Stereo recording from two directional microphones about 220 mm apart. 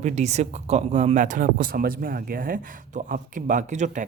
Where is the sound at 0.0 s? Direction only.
30° right (ahead or behind).